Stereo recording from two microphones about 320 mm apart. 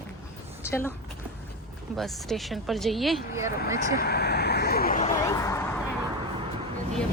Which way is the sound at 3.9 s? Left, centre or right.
Left.